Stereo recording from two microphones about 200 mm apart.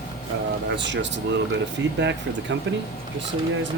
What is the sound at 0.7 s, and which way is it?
Speech, 60° right (ahead or behind).